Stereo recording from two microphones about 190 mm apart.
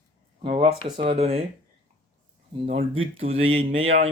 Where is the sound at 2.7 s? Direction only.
30° right (ahead or behind).